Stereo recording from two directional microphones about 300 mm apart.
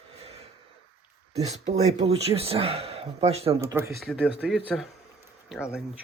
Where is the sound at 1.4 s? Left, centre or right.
Right.